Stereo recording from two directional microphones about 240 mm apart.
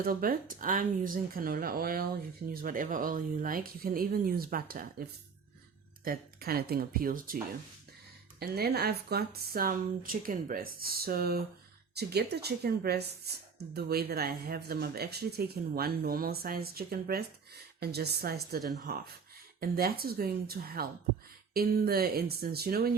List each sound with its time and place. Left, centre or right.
0.0 s speech: right
6.1 s speech: right
8.4 s speech: right